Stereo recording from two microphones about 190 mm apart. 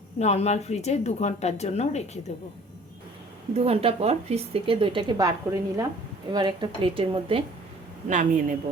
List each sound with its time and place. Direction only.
0.2 s speech: 35° left (ahead or behind)
3.5 s speech: 30° right (ahead or behind)
8.0 s a woman's voice: 40° right (ahead or behind)